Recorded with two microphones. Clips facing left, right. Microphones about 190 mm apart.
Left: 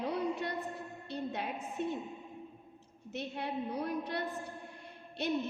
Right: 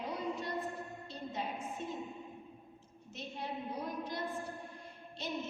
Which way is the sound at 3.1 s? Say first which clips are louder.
Left 5 dB; 65° left (ahead or behind).